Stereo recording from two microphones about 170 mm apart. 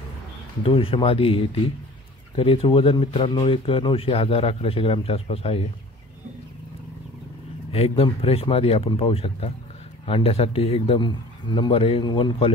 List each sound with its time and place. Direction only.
0.7 s speech: 35° left (ahead or behind)
7.7 s speech: 35° left (ahead or behind)